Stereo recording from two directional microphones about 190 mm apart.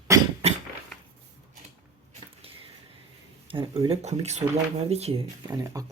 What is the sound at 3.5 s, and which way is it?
Speech, 25° right (ahead or behind).